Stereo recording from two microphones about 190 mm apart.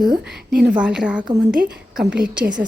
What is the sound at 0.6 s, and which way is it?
A woman's voice, 5° right (ahead or behind).